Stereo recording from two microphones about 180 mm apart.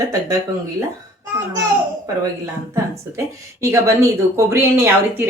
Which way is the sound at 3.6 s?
15° right (ahead or behind).